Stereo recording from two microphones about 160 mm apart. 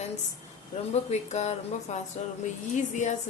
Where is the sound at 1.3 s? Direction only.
45° left (ahead or behind).